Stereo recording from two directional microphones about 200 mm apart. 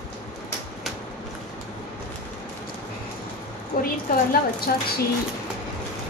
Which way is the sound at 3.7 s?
45° left (ahead or behind).